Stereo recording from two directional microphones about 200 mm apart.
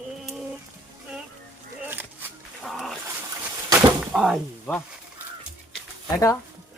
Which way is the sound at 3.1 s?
15° right (ahead or behind).